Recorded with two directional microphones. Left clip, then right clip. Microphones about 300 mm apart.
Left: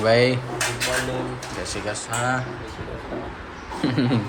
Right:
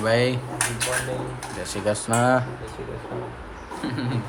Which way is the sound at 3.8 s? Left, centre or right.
Centre.